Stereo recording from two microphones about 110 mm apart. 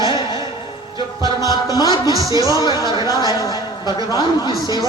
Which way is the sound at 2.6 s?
40° left (ahead or behind).